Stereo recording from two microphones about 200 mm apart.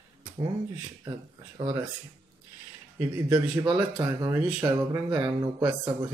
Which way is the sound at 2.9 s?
10° right (ahead or behind).